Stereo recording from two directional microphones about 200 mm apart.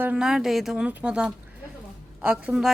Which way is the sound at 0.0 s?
5° right (ahead or behind).